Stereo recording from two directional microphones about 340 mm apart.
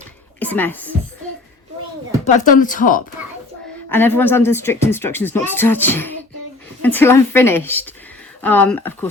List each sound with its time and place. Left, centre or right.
0.3 s a woman's voice: centre
2.2 s speech: left
3.8 s speech: centre